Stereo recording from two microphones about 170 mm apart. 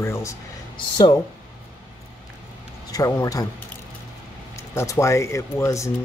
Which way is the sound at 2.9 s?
20° left (ahead or behind).